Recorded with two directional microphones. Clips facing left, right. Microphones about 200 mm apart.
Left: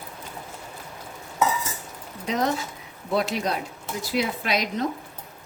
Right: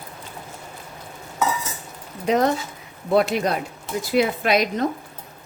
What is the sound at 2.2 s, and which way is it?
Speech, 55° right (ahead or behind).